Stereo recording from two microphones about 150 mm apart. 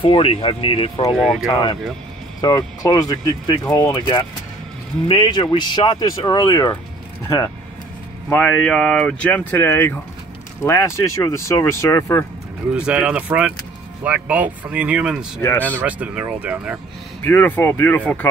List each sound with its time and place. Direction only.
0.0 s speech: 35° left (ahead or behind)
1.1 s speech: centre (ahead or behind)
2.4 s speech: 25° left (ahead or behind)
8.3 s speech: 5° left (ahead or behind)
12.7 s speech: 5° right (ahead or behind)
17.2 s speech: 15° left (ahead or behind)